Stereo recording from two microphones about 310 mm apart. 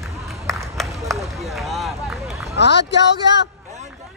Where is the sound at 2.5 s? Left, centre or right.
Left.